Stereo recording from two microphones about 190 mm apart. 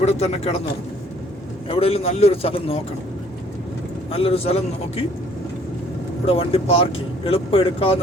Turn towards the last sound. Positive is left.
turn(degrees=30)  # may be behind; listen again after turning